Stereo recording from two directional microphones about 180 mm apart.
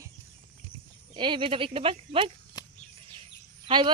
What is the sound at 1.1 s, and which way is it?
Speech, 25° right (ahead or behind).